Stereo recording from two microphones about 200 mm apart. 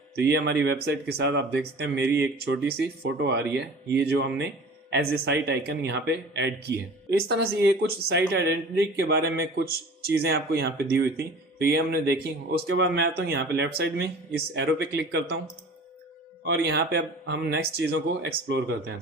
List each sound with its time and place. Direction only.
0.2 s a man's voice: 55° right (ahead or behind)
16.5 s speech: 55° right (ahead or behind)